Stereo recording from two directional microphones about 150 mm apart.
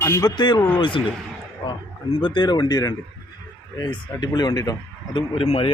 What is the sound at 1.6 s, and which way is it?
Speech, 35° left (ahead or behind).